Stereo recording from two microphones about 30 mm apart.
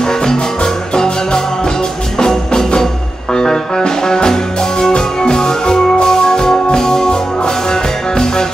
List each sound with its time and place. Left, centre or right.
0.0 s music: centre